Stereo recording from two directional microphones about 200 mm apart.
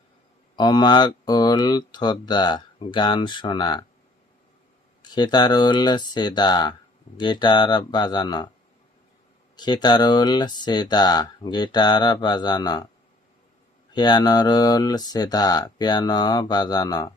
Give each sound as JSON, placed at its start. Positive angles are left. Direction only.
{"t": 0.5, "sound": "speech", "side_deg": 20}
{"t": 5.1, "sound": "speech", "side_deg": 20}
{"t": 9.6, "sound": "speech", "side_deg": 20}
{"t": 13.9, "sound": "speech", "side_deg": 20}